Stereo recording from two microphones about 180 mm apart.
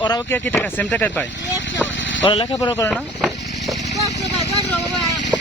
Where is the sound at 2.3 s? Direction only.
25° left (ahead or behind).